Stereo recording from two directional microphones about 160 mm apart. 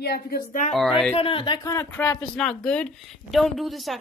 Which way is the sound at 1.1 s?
35° left (ahead or behind).